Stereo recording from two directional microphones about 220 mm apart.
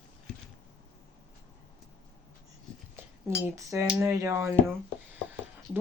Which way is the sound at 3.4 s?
10° right (ahead or behind).